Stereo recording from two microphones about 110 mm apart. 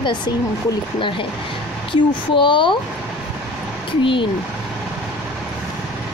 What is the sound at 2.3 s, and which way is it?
Speech, 50° left (ahead or behind).